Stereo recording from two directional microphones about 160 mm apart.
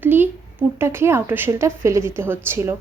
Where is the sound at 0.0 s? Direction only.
10° right (ahead or behind).